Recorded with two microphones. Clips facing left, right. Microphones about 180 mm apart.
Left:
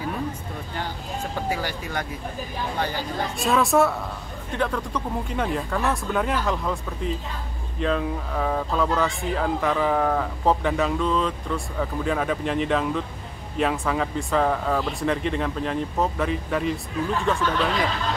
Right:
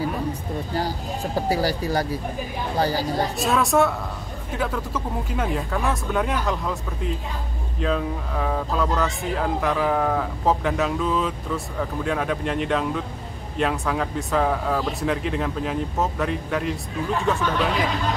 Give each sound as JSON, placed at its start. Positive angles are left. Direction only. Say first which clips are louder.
{"t": 0.7, "sound": "speech", "louder": "right 3 dB", "side_deg": -35}
{"t": 3.3, "sound": "speech", "louder": "left 1 dB", "side_deg": 0}